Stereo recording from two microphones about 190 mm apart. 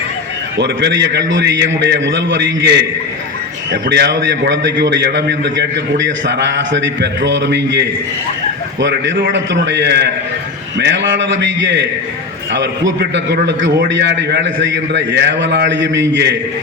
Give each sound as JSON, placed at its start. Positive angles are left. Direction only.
{"t": 0.5, "sound": "a man's voice", "side_deg": -65}